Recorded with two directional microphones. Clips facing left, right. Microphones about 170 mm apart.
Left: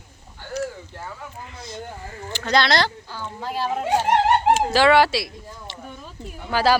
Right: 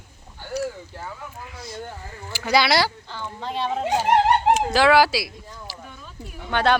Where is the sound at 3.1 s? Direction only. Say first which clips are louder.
Left 1 dB; 5° left (ahead or behind).